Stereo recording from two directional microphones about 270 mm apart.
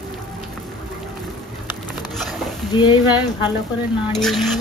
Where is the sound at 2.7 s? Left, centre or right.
Centre.